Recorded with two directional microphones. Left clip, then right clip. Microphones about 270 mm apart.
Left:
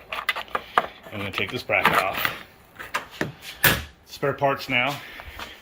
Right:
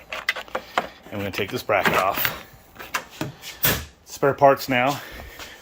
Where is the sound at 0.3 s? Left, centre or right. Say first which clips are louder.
Right 1 dB; centre.